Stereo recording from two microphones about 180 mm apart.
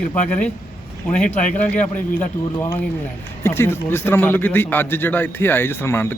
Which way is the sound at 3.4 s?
15° left (ahead or behind).